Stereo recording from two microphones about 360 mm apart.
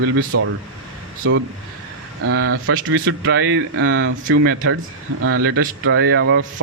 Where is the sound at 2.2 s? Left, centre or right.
Right.